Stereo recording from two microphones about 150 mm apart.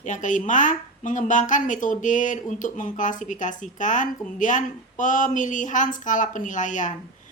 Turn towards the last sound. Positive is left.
turn(degrees=55)  # may be behind; listen again after turning